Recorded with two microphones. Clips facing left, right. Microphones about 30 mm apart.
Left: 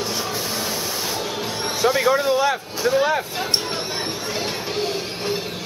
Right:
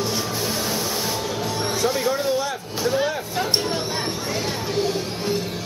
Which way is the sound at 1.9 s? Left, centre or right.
Left.